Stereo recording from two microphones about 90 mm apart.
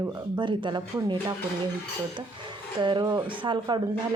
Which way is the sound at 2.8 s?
60° right (ahead or behind).